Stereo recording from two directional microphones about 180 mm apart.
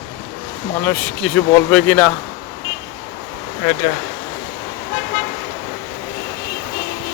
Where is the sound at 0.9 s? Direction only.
10° left (ahead or behind).